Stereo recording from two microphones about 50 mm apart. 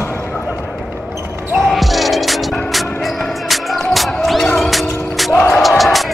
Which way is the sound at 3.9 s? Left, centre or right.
Centre.